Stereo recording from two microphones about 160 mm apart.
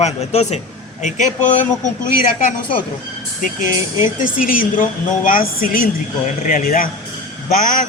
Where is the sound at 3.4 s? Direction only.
55° left (ahead or behind).